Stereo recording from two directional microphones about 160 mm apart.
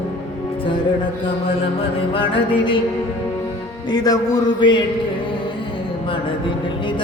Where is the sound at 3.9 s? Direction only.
25° left (ahead or behind).